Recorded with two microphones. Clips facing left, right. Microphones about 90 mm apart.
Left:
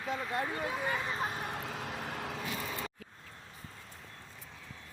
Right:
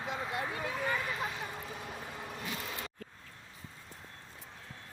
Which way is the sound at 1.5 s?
75° left (ahead or behind).